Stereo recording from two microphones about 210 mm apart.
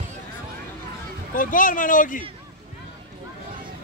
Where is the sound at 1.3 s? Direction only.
40° left (ahead or behind).